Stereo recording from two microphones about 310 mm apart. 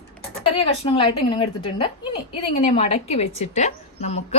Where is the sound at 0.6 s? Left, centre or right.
Centre.